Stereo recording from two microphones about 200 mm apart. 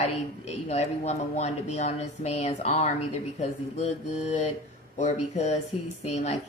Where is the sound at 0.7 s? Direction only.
35° left (ahead or behind).